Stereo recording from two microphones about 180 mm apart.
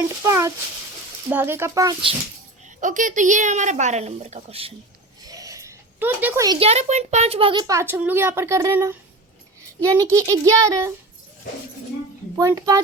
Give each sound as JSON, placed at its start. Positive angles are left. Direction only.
{"t": 0.3, "sound": "speech", "side_deg": -15}
{"t": 2.8, "sound": "a woman's voice", "side_deg": -45}
{"t": 5.2, "sound": "a sound", "side_deg": -20}
{"t": 6.6, "sound": "a woman's voice", "side_deg": -35}
{"t": 7.7, "sound": "speech", "side_deg": -15}
{"t": 12.4, "sound": "speech", "side_deg": -20}